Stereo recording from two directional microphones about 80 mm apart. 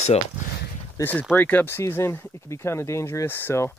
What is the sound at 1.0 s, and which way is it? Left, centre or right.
Speech, left.